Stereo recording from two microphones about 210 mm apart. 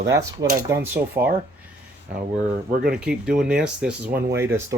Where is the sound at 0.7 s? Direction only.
10° right (ahead or behind).